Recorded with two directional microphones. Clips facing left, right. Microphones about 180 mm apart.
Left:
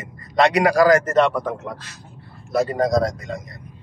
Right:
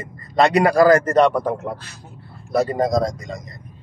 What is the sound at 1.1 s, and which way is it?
Speech, 35° right (ahead or behind).